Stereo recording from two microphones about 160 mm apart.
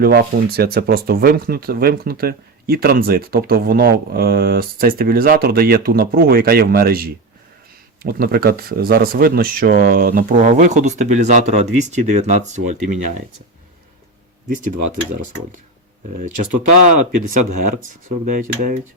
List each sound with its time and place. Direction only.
0.0 s speech: 75° right (ahead or behind); by 13.0 s 50° right (ahead or behind)
14.4 s speech: 55° right (ahead or behind)
16.1 s speech: 55° right (ahead or behind)